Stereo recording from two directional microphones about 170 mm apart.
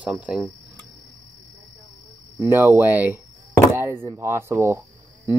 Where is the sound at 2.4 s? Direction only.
15° right (ahead or behind).